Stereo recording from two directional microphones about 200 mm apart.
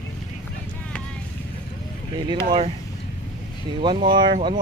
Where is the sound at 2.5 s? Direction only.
30° right (ahead or behind).